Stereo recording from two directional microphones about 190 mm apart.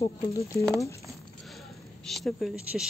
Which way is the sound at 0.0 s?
15° left (ahead or behind).